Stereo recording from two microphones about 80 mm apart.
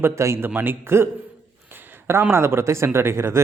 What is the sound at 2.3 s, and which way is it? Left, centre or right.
A man's voice, right.